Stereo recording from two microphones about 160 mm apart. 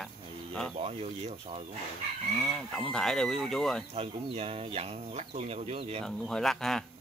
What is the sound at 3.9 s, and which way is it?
Speech, 40° right (ahead or behind).